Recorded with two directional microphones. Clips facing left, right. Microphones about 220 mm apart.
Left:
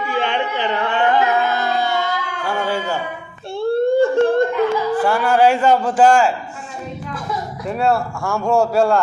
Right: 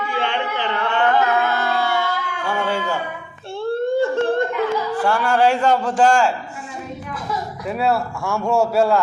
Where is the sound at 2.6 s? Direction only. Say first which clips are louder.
Left 1 dB; centre (ahead or behind).